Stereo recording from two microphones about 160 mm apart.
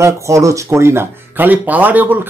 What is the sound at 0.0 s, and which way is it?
Speech, 20° right (ahead or behind).